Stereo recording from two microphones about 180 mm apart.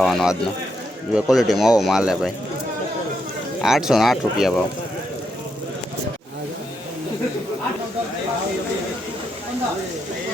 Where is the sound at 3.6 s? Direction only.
Centre (ahead or behind).